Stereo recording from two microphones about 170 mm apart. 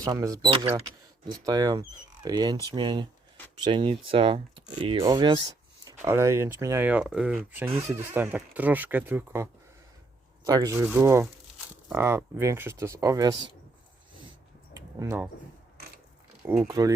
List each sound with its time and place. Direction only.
0.0 s speech: 20° right (ahead or behind)
14.9 s speech: 15° right (ahead or behind)
16.5 s speech: 15° right (ahead or behind)